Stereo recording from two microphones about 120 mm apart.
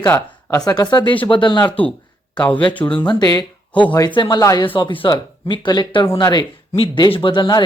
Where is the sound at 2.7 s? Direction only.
10° left (ahead or behind).